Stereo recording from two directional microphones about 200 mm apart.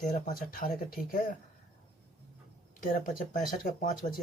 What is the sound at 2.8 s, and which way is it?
Speech, 40° left (ahead or behind).